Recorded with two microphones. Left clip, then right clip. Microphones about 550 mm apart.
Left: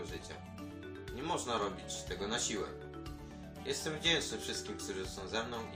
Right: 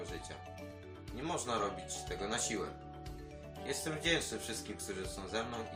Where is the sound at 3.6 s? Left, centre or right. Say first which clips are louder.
Left 2 dB; left.